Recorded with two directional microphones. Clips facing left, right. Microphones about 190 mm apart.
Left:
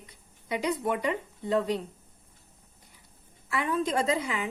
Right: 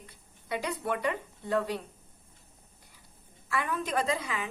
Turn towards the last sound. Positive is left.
turn(degrees=25)  # may be behind; listen again after turning